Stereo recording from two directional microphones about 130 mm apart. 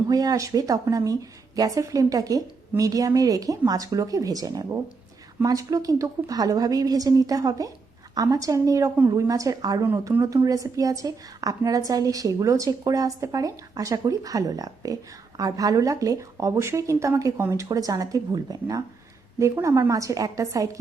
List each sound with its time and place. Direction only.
0.1 s a woman's voice: 30° right (ahead or behind)